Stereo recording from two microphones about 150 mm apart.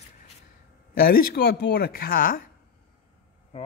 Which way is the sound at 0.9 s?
75° left (ahead or behind).